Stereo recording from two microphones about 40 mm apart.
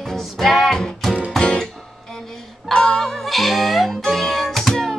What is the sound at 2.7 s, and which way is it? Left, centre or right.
Music, centre.